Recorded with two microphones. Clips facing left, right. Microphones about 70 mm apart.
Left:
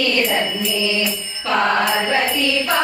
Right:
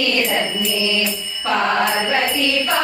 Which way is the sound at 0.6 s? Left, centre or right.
Centre.